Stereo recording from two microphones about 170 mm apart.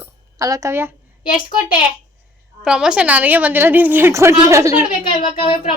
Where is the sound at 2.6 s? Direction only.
5° right (ahead or behind).